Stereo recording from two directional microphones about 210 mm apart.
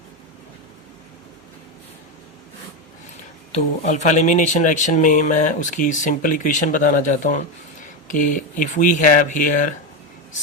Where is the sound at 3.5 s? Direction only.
35° left (ahead or behind).